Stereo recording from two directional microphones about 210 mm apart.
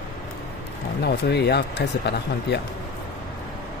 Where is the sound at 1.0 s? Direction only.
50° left (ahead or behind).